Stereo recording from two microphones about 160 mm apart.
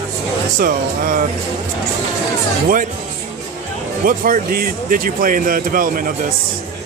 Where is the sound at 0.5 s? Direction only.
55° right (ahead or behind).